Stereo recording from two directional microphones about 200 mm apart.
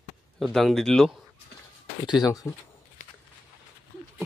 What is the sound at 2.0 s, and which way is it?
Speech, 20° left (ahead or behind).